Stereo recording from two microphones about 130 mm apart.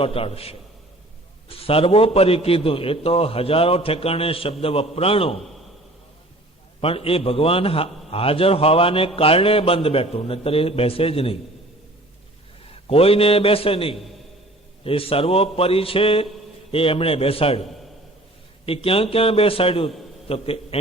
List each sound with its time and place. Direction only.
0.0 s a man's voice: 45° left (ahead or behind)
6.8 s a man's voice: 45° left (ahead or behind)
12.9 s a man's voice: 45° left (ahead or behind)